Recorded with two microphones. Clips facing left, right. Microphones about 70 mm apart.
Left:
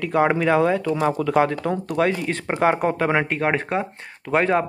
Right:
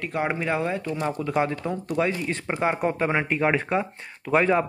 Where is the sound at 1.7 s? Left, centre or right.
Left.